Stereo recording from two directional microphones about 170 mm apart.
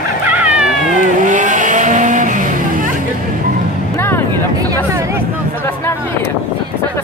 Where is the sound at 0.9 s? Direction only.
50° right (ahead or behind).